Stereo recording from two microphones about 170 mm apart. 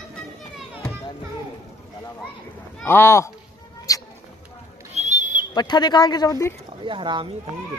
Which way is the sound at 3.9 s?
20° left (ahead or behind).